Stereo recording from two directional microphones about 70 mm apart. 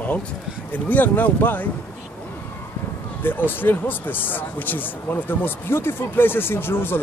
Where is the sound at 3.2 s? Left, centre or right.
Left.